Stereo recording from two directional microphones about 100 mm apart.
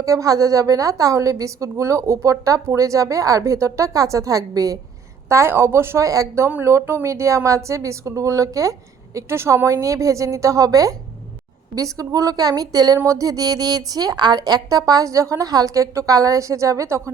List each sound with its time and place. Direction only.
0.0 s a woman's voice: 35° right (ahead or behind)
5.3 s a woman's voice: 25° right (ahead or behind)